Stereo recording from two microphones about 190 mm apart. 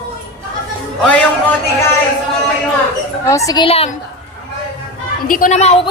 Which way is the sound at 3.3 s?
15° left (ahead or behind).